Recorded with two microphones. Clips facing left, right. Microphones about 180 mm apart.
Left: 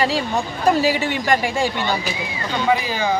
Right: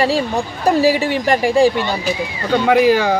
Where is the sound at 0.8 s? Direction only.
35° right (ahead or behind).